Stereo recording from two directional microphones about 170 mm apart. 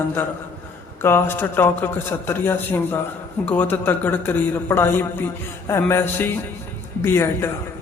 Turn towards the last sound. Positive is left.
turn(degrees=15)  # may be behind; listen again after turning